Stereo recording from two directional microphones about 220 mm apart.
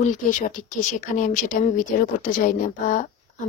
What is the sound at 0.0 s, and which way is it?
Speech, 35° left (ahead or behind).